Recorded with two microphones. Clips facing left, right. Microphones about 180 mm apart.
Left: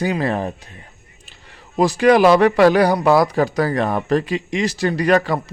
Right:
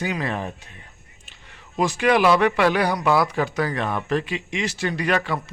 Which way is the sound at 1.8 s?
35° left (ahead or behind).